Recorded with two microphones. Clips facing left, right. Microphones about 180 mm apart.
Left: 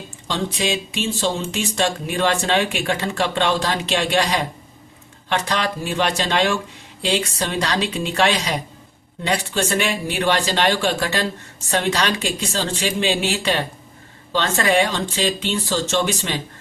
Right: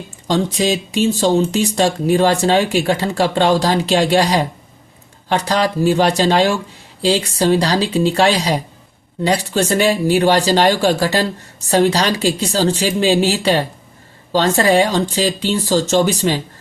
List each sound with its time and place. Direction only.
0.3 s speech: 40° right (ahead or behind)